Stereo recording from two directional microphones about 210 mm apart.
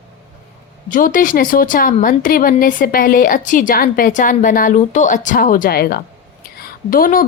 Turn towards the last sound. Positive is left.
turn(degrees=40)  # may be behind; listen again after turning